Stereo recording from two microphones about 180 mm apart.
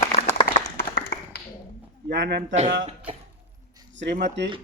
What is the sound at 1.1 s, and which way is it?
Tap, 65° left (ahead or behind).